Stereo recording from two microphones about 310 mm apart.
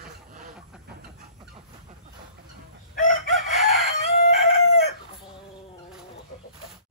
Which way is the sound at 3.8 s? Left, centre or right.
Left.